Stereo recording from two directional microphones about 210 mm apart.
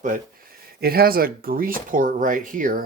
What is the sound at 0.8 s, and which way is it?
Speech, 45° right (ahead or behind).